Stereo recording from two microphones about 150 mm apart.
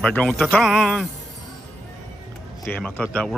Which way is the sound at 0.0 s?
5° left (ahead or behind).